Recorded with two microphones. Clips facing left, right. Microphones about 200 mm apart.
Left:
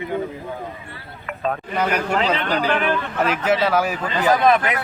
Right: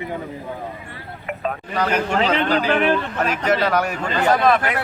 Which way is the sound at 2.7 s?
25° right (ahead or behind).